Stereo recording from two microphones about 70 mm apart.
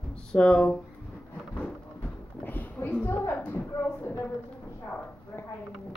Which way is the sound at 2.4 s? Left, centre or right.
Left.